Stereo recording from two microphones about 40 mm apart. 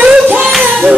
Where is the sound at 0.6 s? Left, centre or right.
Right.